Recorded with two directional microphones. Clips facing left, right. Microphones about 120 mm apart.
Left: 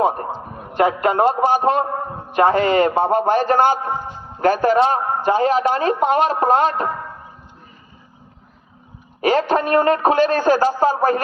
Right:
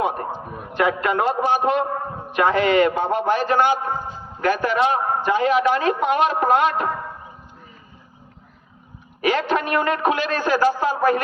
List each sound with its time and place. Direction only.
0.0 s a man's voice: 35° left (ahead or behind)
9.2 s a man's voice: 40° left (ahead or behind)